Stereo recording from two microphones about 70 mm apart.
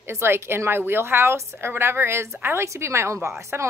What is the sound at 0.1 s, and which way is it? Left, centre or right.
A woman's voice, right.